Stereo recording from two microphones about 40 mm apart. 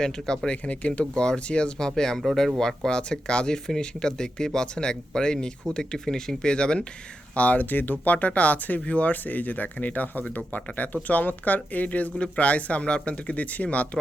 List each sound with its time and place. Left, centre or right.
0.0 s speech: centre
0.5 s speech: left
1.1 s speech: left
7.3 s speech: left
8.8 s speech: left
9.1 s speech: left
12.1 s speech: left